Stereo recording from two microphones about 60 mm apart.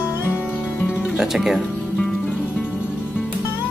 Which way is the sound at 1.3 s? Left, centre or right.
Centre.